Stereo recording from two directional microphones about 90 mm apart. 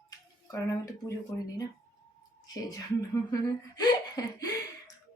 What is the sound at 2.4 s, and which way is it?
Speech, 40° left (ahead or behind).